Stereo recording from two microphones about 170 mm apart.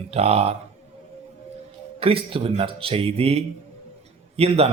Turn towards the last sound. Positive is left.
turn(degrees=-35)  # may be behind; listen again after turning